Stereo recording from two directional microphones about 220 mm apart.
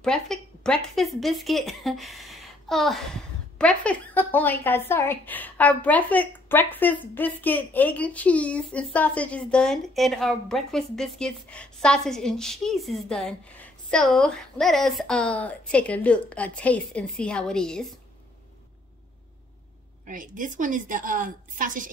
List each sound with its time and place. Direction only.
0.0 s a woman's voice: 5° left (ahead or behind)
20.1 s a woman's voice: 35° right (ahead or behind)